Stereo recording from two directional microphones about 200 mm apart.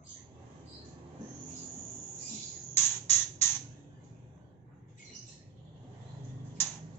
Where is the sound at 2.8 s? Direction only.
10° left (ahead or behind).